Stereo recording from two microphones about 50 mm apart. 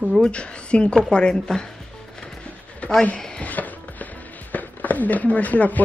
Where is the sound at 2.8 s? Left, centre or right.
Left.